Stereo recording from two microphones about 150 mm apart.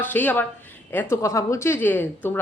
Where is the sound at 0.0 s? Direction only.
10° left (ahead or behind).